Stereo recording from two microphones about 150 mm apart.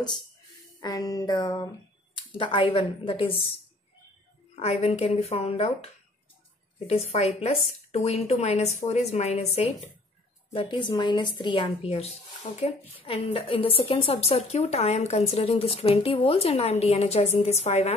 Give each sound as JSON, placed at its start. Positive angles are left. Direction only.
{"t": 0.7, "sound": "a sound", "side_deg": 25}
{"t": 2.1, "sound": "speech", "side_deg": 35}
{"t": 4.6, "sound": "speech", "side_deg": 45}
{"t": 6.9, "sound": "speech", "side_deg": 45}
{"t": 10.5, "sound": "speech", "side_deg": 35}